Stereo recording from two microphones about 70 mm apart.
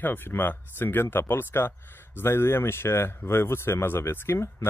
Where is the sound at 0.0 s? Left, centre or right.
Left.